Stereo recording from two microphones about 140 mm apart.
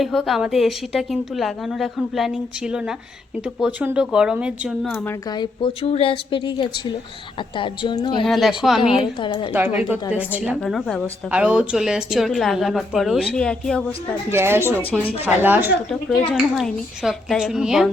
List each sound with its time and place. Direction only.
0.0 s a woman's voice: centre (ahead or behind)
5.3 s a woman's voice: 30° left (ahead or behind)
5.8 s a woman's voice: 45° left (ahead or behind)
8.2 s a woman's voice: centre (ahead or behind)
8.9 s a woman's voice: 40° left (ahead or behind)
9.8 s a woman's voice: 10° right (ahead or behind)
10.6 s a woman's voice: 5° left (ahead or behind)
11.3 s a woman's voice: 10° right (ahead or behind); by 13.8 s 5° left (ahead or behind)
14.3 s a woman's voice: 15° right (ahead or behind)
16.3 s a woman's voice: centre (ahead or behind)